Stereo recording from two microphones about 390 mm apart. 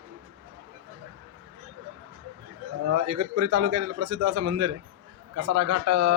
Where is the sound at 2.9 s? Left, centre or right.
Right.